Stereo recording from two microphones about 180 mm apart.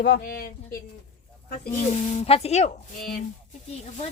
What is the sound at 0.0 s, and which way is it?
Speech, 65° left (ahead or behind).